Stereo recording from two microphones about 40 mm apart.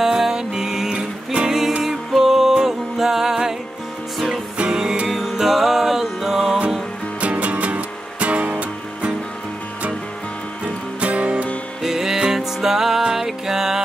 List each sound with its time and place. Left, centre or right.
0.0 s music: centre
0.9 s music: right
1.8 s music: centre
5.0 s music: centre
7.2 s music: right
10.6 s music: right
11.8 s music: centre